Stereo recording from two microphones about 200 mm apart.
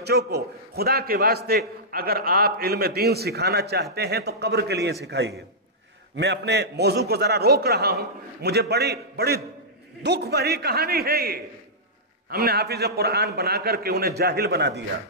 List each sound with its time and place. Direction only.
0.0 s a man's voice: 55° right (ahead or behind)